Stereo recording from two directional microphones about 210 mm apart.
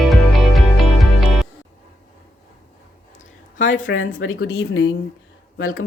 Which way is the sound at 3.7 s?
65° left (ahead or behind).